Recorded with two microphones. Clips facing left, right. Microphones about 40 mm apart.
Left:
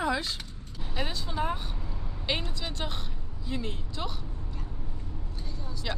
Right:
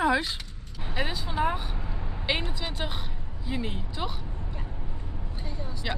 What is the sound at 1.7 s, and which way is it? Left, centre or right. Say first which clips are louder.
Vehicle: right 3 dB; right.